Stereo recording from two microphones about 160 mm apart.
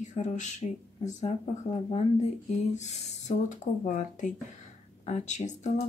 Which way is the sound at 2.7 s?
45° left (ahead or behind).